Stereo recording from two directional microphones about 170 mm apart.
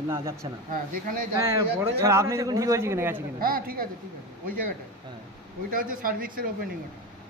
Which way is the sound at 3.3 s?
60° right (ahead or behind).